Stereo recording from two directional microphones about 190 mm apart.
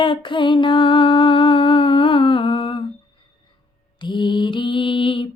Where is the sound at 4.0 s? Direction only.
25° left (ahead or behind).